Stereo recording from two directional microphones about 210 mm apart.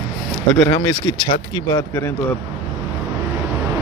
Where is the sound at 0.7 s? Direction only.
20° left (ahead or behind).